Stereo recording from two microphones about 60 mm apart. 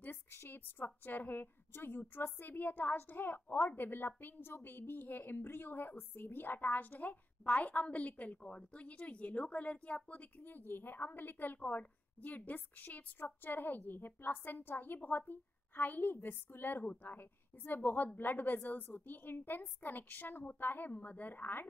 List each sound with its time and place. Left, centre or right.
0.0 s a woman's voice: left
10.4 s a woman's voice: left